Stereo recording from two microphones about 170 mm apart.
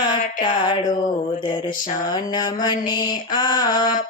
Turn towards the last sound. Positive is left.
turn(degrees=25)  # may be behind; listen again after turning